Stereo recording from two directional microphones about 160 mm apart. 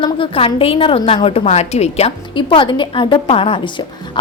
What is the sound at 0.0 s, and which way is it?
A woman's voice, 35° left (ahead or behind).